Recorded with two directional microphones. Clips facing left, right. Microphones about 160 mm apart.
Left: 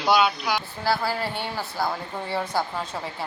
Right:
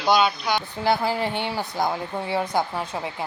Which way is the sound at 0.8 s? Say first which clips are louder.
Right 3 dB; 20° right (ahead or behind).